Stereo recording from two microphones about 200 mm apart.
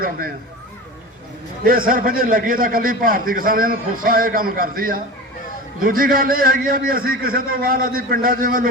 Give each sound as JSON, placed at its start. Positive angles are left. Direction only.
{"t": 1.6, "sound": "a man's voice", "side_deg": -45}